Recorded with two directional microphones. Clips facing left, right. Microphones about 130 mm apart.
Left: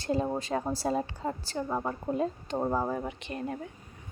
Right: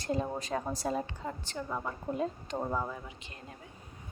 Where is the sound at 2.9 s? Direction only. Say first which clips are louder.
Left 10 dB; 55° left (ahead or behind).